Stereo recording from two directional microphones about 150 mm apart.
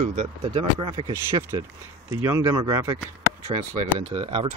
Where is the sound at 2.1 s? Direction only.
20° right (ahead or behind).